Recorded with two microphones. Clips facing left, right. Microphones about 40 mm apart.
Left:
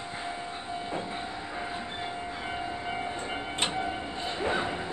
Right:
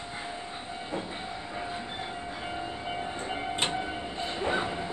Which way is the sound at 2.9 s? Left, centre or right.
Centre.